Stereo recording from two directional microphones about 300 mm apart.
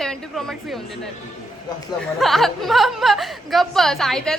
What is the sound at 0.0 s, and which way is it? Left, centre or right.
Speech, centre.